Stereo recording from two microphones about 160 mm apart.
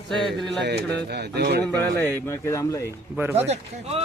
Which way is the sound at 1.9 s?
15° left (ahead or behind).